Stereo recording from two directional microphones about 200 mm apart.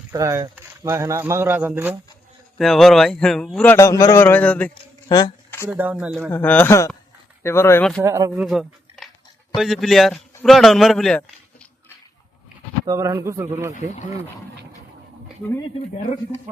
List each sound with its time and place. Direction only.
0.1 s speech: 15° right (ahead or behind)
2.6 s a man's voice: centre (ahead or behind)
4.7 s a sound: 20° left (ahead or behind)
5.6 s speech: 5° right (ahead or behind)
6.3 s a man's voice: 10° left (ahead or behind)
8.0 s speech: 15° right (ahead or behind)
8.3 s a man's voice: centre (ahead or behind)
12.8 s speech: 15° right (ahead or behind)